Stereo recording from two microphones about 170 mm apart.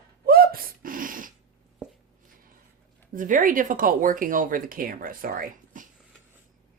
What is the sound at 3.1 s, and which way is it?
Speech, 50° right (ahead or behind).